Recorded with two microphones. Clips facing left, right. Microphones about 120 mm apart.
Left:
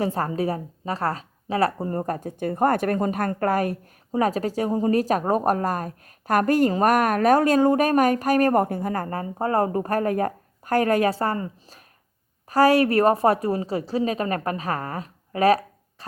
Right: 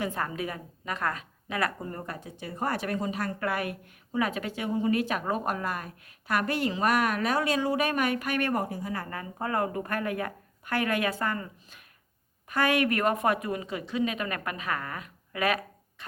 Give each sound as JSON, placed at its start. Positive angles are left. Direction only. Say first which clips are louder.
{"t": 0.0, "sound": "a woman's voice", "louder": "left 7 dB", "side_deg": 35}